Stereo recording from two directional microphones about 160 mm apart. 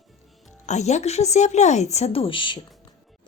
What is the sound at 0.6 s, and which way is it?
Speech, 45° left (ahead or behind).